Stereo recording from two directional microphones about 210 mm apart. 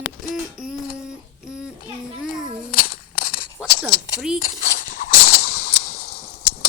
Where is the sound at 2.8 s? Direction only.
45° left (ahead or behind).